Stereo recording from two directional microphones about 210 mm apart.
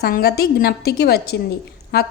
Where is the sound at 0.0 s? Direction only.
50° left (ahead or behind).